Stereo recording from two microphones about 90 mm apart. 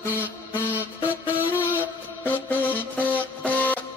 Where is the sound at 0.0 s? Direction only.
20° left (ahead or behind).